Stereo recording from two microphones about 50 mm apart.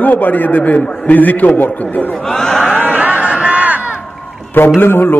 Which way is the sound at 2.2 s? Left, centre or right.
Centre.